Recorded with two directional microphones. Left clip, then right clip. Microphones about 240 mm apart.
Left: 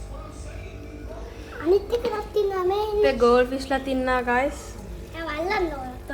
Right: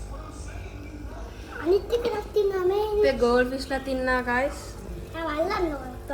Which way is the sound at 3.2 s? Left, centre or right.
Left.